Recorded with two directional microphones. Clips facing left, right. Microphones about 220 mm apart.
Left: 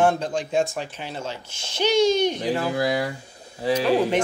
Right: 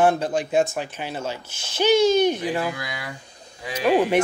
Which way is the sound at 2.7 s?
35° left (ahead or behind).